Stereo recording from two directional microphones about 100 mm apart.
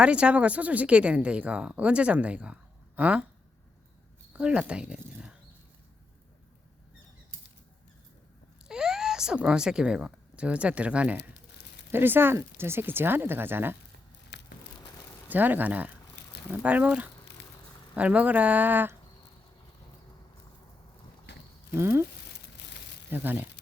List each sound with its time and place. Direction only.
0.0 s a woman's voice: 10° right (ahead or behind)
4.4 s a woman's voice: 10° right (ahead or behind)
8.6 s speech: 5° right (ahead or behind); by 13.7 s 20° right (ahead or behind)
15.3 s a woman's voice: 20° right (ahead or behind)
21.8 s speech: 25° right (ahead or behind)
23.0 s speech: 20° right (ahead or behind)